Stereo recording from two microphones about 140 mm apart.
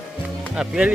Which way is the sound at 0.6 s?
5° right (ahead or behind).